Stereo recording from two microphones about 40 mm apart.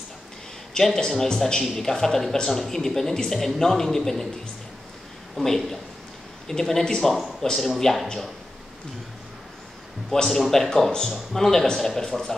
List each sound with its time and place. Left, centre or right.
0.7 s speech: centre
5.3 s speech: centre
10.1 s speech: centre
10.7 s speech: centre